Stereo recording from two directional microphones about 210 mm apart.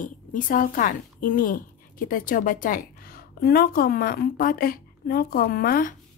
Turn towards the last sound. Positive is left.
turn(degrees=45)  # may be behind; listen again after turning